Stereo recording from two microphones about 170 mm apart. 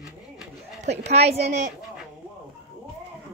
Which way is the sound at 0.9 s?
40° right (ahead or behind).